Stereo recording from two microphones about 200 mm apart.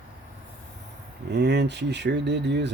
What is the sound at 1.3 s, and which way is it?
Speech, 55° right (ahead or behind).